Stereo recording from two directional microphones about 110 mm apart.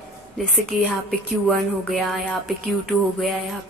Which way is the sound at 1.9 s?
Centre (ahead or behind).